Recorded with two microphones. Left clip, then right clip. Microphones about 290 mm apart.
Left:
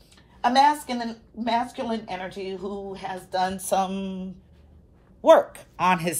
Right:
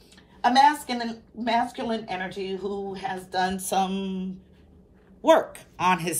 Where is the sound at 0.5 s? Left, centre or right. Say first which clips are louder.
Even; centre.